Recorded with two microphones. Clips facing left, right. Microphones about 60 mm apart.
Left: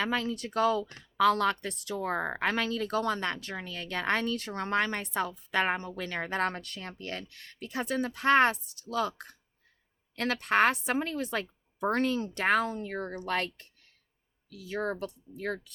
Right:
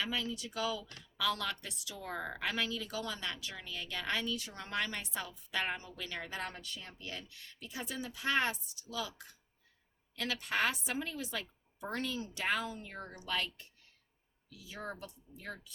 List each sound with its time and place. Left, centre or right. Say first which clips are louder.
0.0 s speech: left 7 dB; left